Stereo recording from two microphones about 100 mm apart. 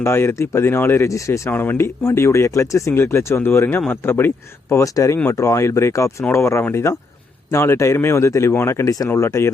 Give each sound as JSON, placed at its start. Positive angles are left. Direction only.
{"t": 0.0, "sound": "speech", "side_deg": 25}